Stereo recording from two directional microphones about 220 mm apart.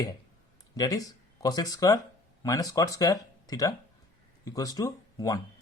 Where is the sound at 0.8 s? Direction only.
15° left (ahead or behind).